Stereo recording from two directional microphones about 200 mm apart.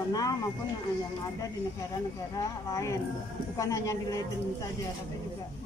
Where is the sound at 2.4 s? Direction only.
15° left (ahead or behind).